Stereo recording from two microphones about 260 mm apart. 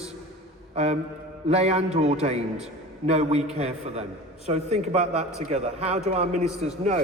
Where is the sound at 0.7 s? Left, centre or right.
Right.